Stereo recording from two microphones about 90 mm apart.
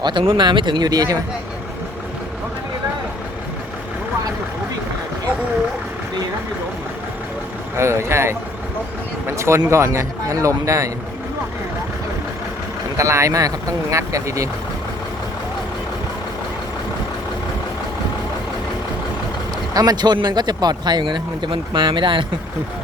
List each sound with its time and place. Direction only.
0.0 s speech: 65° right (ahead or behind); by 1.2 s 45° right (ahead or behind)
7.8 s speech: 30° right (ahead or behind)
13.0 s speech: 35° right (ahead or behind)
19.7 s speech: 45° right (ahead or behind); by 22.3 s 65° right (ahead or behind)